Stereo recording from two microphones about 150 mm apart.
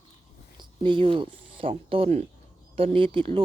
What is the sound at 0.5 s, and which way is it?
Speech, 35° right (ahead or behind).